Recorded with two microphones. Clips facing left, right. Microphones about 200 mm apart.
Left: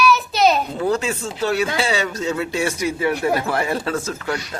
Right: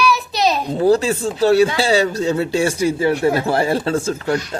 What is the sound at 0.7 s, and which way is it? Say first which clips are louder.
Speech: right 6 dB; 35° right (ahead or behind).